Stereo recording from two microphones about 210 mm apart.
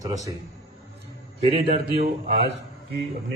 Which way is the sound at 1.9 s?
30° right (ahead or behind).